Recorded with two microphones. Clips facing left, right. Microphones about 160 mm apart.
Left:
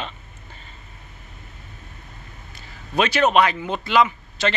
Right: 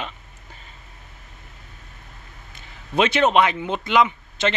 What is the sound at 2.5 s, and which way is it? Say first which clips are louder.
A man's voice: right 2 dB; 20° right (ahead or behind).